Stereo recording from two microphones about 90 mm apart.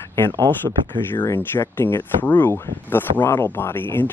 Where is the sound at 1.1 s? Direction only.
25° left (ahead or behind).